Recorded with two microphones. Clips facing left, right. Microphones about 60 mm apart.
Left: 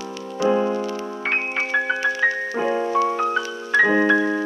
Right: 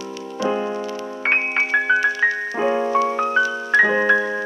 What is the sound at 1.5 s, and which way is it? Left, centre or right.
Music, right.